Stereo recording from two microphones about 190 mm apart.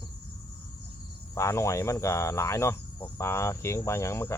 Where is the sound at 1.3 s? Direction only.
15° left (ahead or behind).